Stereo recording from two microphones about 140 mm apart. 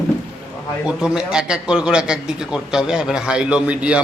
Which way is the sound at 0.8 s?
5° right (ahead or behind).